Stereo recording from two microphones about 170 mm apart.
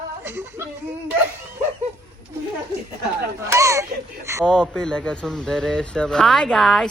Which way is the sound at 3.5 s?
15° right (ahead or behind).